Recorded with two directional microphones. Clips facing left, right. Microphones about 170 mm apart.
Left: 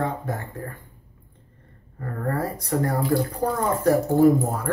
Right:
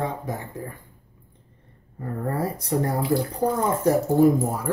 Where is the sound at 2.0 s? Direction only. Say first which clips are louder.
Even; 15° right (ahead or behind).